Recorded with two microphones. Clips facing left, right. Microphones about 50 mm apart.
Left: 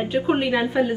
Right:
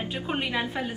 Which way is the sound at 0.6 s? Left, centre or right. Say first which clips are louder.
Left 10 dB; left.